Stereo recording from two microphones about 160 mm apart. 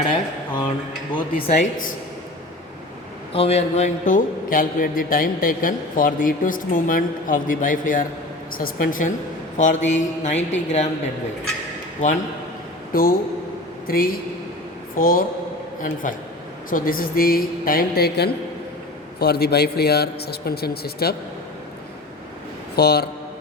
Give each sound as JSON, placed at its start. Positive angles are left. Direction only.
{"t": 0.1, "sound": "speech", "side_deg": 30}
{"t": 1.3, "sound": "a man's voice", "side_deg": 60}
{"t": 3.3, "sound": "a man's voice", "side_deg": 40}
{"t": 12.9, "sound": "a man's voice", "side_deg": 65}
{"t": 22.7, "sound": "a man's voice", "side_deg": 80}